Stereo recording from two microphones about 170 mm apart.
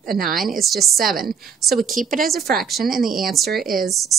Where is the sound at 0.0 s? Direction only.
55° right (ahead or behind).